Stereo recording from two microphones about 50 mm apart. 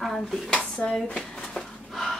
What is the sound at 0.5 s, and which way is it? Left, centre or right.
Speech, left.